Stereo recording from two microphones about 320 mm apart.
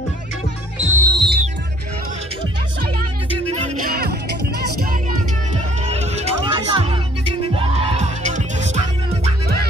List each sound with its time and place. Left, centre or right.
0.7 s music: centre
3.5 s music: right
5.9 s music: centre